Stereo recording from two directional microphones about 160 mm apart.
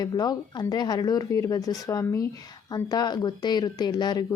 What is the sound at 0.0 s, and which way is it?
A woman's voice, 25° left (ahead or behind).